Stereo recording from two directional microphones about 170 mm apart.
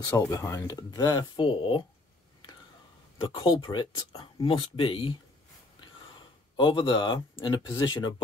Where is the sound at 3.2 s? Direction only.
30° left (ahead or behind).